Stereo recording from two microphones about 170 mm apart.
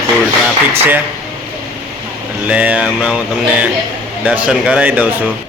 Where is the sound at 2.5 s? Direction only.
10° right (ahead or behind).